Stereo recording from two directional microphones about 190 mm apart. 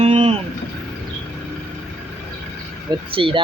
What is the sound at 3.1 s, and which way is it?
Speech, 30° right (ahead or behind).